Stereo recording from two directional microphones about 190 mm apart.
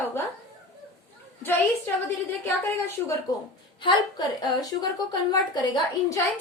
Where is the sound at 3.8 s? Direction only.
20° left (ahead or behind).